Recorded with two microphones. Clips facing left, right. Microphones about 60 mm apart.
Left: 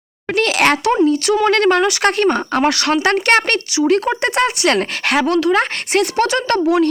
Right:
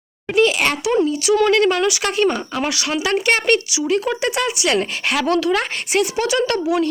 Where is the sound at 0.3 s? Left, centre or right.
Left.